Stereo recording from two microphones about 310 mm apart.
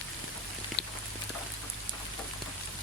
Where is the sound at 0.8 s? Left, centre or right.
Left.